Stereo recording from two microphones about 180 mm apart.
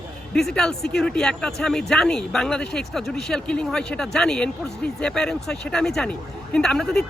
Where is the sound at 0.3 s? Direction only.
5° left (ahead or behind).